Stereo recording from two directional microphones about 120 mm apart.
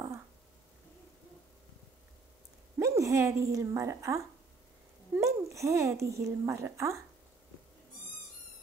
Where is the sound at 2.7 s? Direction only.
25° right (ahead or behind).